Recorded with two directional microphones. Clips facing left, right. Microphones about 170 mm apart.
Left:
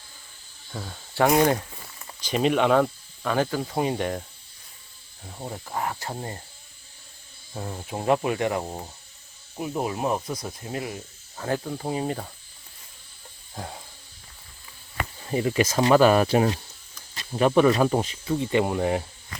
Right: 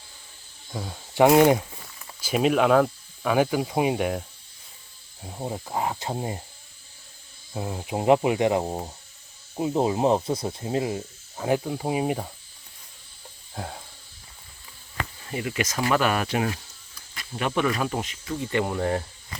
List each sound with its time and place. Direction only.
0.7 s speech: 10° right (ahead or behind)
5.2 s speech: 20° right (ahead or behind)
7.5 s speech: 15° right (ahead or behind)
13.5 s a sound: centre (ahead or behind)
15.2 s speech: 30° left (ahead or behind); by 19.0 s 10° left (ahead or behind)